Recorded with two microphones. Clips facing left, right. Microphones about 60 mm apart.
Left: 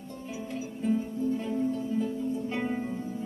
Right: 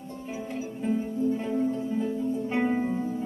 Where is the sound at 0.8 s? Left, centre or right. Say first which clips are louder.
Right 2 dB; right.